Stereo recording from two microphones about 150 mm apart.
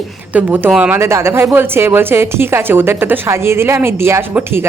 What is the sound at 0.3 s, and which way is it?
A woman's voice, 10° right (ahead or behind).